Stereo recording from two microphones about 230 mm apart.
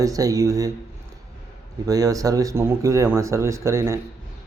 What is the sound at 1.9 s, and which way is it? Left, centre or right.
Speech, centre.